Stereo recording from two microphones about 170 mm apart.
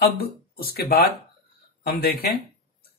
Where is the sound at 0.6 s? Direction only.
65° left (ahead or behind).